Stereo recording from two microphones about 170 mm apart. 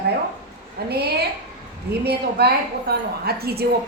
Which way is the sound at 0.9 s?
70° right (ahead or behind).